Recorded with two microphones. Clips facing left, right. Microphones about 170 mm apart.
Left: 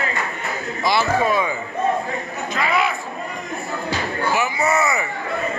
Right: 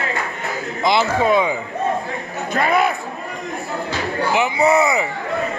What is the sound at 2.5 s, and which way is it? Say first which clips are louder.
Chatter: right 4 dB; 45° right (ahead or behind).